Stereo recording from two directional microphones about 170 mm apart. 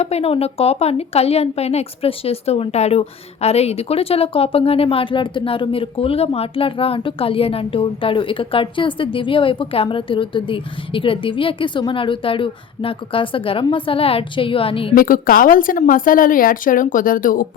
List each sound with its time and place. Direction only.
0.0 s a woman's voice: 35° left (ahead or behind)
14.9 s a woman's voice: 55° left (ahead or behind)